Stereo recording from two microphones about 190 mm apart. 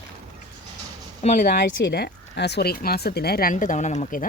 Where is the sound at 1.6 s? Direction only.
60° left (ahead or behind).